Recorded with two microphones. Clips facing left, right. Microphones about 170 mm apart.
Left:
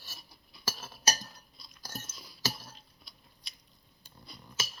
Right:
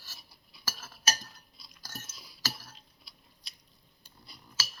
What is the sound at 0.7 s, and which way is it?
Chink, 20° left (ahead or behind).